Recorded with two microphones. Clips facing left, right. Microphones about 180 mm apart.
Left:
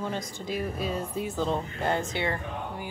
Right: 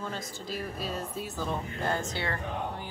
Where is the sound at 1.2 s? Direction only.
20° left (ahead or behind).